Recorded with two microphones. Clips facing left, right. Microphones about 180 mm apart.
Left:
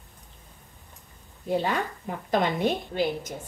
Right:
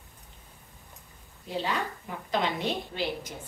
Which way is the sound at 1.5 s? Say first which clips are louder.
Left 5 dB; 50° left (ahead or behind).